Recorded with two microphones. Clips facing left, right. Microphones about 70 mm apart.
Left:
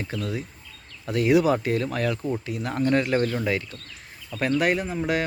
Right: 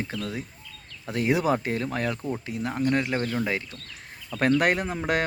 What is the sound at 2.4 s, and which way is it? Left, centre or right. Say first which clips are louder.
Speech: even; right.